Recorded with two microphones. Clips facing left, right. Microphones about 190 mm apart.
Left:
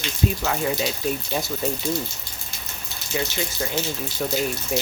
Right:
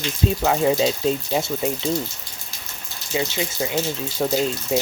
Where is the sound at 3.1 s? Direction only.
20° right (ahead or behind).